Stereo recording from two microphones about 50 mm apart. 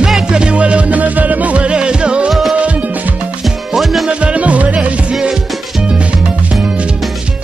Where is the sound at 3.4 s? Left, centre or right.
Centre.